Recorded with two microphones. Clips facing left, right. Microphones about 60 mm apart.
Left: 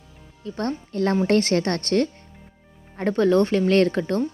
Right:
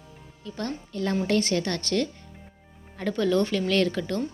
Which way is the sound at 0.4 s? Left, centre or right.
Left.